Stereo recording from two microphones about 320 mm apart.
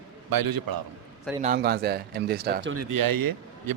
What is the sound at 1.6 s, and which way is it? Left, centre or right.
Speech, right.